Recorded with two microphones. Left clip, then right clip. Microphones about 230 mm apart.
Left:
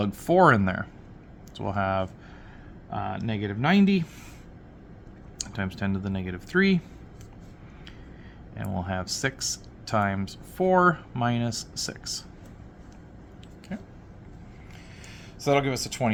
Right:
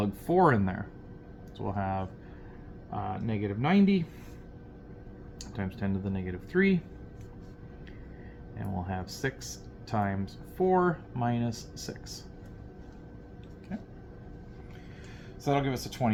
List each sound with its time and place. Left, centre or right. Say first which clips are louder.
0.0 s speech: left 5 dB; left
5.4 s speech: left 6 dB; left
8.5 s speech: left 5 dB; left
15.4 s speech: left 6 dB; left